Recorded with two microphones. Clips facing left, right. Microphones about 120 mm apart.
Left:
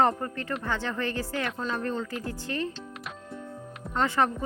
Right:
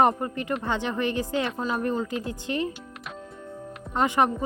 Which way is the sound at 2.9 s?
Centre (ahead or behind).